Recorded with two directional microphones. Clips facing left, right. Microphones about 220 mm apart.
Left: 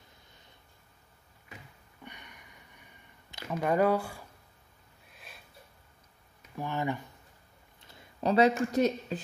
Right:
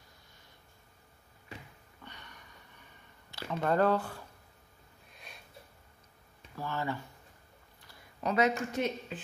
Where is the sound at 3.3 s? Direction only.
15° left (ahead or behind).